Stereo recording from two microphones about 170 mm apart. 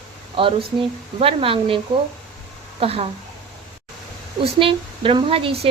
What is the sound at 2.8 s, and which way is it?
Speech, 35° right (ahead or behind).